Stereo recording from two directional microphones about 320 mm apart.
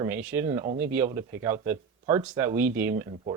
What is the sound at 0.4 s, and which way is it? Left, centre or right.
Speech, centre.